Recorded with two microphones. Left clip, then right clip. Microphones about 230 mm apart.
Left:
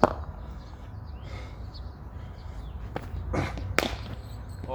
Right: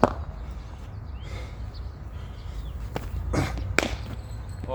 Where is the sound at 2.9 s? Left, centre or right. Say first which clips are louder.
Right 2 dB; right.